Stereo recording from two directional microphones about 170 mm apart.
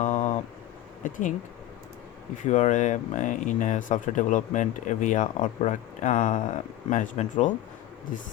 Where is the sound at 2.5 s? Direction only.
45° left (ahead or behind).